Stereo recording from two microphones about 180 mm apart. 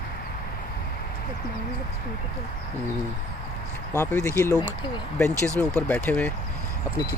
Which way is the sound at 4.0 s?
15° left (ahead or behind).